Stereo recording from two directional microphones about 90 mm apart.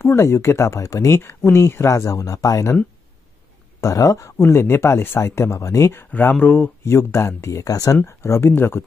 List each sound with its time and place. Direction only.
0.0 s speech: 30° left (ahead or behind)
3.8 s speech: 40° left (ahead or behind)
4.4 s speech: 30° left (ahead or behind)
6.8 s speech: 30° left (ahead or behind)
8.0 s speech: 25° left (ahead or behind)